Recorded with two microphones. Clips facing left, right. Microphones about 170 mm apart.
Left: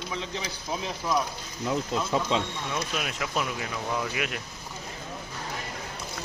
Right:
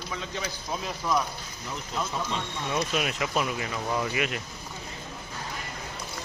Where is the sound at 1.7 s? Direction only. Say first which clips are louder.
Left 6 dB; 90° left.